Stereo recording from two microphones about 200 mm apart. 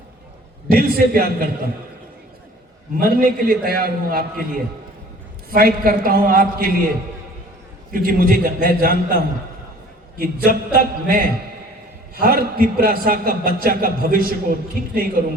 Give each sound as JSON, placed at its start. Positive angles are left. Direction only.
{"t": 0.7, "sound": "a man's voice", "side_deg": -50}
{"t": 3.0, "sound": "a man's voice", "side_deg": -45}
{"t": 7.9, "sound": "a man's voice", "side_deg": -45}